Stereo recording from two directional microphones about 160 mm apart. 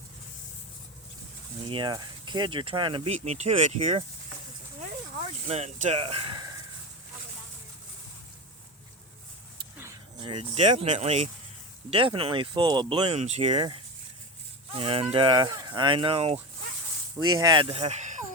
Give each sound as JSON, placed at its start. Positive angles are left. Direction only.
{"t": 1.6, "sound": "speech", "side_deg": -30}
{"t": 10.2, "sound": "speech", "side_deg": -35}
{"t": 13.1, "sound": "speech", "side_deg": -45}
{"t": 17.2, "sound": "speech", "side_deg": -25}